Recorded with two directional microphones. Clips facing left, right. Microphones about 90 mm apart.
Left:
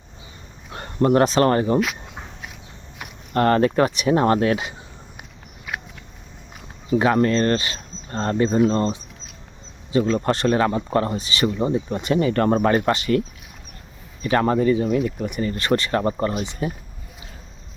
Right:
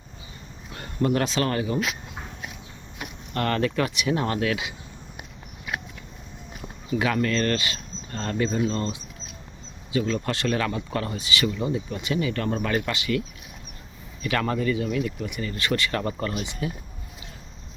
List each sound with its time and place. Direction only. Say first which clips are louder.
1.0 s speech: left 7 dB; 40° left (ahead or behind)
3.3 s speech: left 7 dB; 35° left (ahead or behind)
6.9 s speech: left 6 dB; 35° left (ahead or behind)